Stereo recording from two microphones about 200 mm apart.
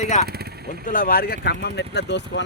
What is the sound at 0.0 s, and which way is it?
Speech, 35° left (ahead or behind).